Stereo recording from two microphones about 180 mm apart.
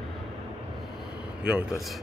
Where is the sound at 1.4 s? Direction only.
5° right (ahead or behind).